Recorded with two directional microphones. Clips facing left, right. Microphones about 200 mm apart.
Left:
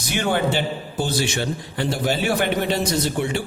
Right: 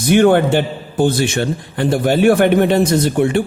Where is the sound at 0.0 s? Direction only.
55° right (ahead or behind).